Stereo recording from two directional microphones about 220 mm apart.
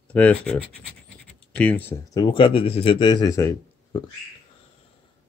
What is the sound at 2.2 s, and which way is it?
Speech, 25° left (ahead or behind).